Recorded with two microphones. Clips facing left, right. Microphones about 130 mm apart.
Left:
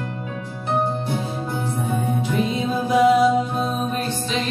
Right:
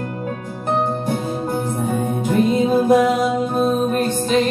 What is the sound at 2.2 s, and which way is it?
Music, 45° right (ahead or behind).